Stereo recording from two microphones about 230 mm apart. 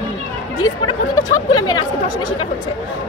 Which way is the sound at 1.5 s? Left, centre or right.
Left.